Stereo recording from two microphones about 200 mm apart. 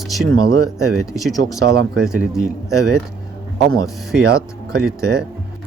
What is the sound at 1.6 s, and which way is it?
Speech, 50° right (ahead or behind).